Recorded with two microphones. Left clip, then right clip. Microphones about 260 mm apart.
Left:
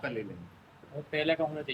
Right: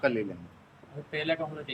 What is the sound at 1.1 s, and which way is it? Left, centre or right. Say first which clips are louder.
Speech: left 1 dB; centre.